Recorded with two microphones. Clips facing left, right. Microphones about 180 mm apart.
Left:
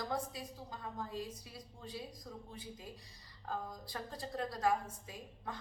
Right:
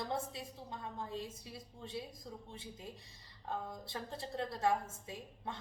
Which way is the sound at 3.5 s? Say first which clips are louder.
Even; 25° right (ahead or behind).